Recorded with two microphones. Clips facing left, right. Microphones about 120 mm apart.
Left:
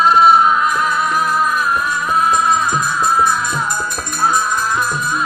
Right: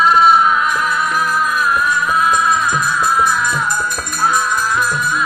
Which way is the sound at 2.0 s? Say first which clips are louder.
Left 3 dB; 30° left (ahead or behind).